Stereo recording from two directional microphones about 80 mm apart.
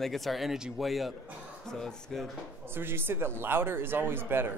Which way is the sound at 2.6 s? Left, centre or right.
Right.